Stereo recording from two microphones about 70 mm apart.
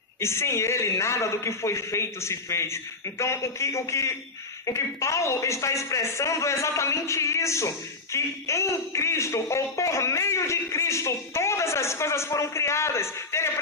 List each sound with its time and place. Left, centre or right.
0.2 s a man's voice: left